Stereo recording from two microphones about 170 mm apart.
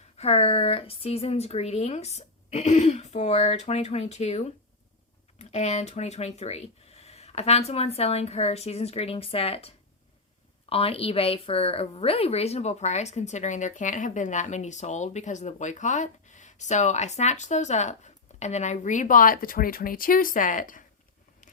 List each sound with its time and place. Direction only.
0.2 s a woman's voice: 35° left (ahead or behind); by 20.8 s 50° left (ahead or behind)